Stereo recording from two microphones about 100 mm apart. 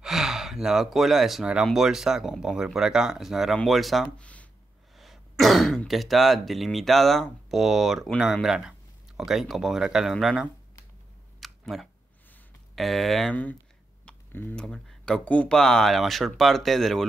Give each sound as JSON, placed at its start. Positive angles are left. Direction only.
{"t": 0.0, "sound": "speech", "side_deg": -5}
{"t": 4.2, "sound": "a sound", "side_deg": 15}
{"t": 4.9, "sound": "throat clearing", "side_deg": 0}
{"t": 5.4, "sound": "speech", "side_deg": 0}
{"t": 11.3, "sound": "a sound", "side_deg": 0}
{"t": 12.7, "sound": "speech", "side_deg": 0}
{"t": 13.3, "sound": "speech", "side_deg": 15}
{"t": 14.0, "sound": "a sound", "side_deg": 15}
{"t": 14.6, "sound": "speech", "side_deg": 5}